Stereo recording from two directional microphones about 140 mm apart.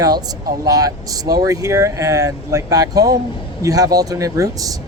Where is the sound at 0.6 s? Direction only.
25° right (ahead or behind).